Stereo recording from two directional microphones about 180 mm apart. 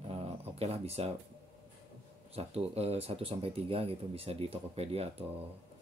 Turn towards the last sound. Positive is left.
turn(degrees=-35)  # may be behind; listen again after turning